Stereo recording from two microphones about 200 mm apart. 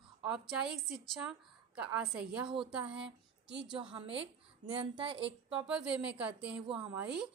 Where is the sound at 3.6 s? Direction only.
25° right (ahead or behind).